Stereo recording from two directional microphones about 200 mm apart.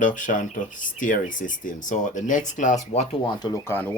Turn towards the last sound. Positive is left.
turn(degrees=10)  # may be behind; listen again after turning